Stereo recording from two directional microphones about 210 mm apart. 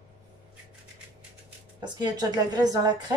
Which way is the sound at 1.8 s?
20° right (ahead or behind).